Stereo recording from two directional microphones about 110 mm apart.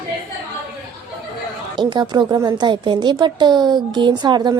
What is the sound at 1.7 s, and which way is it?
A woman's voice, 45° right (ahead or behind).